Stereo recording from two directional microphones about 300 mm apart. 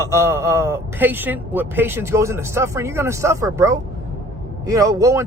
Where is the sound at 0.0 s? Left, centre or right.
Centre.